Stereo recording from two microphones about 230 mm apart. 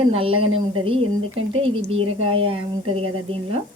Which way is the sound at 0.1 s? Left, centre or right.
Right.